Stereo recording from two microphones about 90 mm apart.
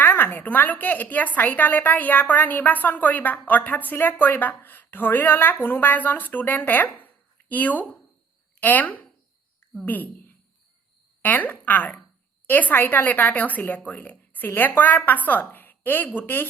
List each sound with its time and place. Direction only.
0.0 s a woman's voice: 25° left (ahead or behind)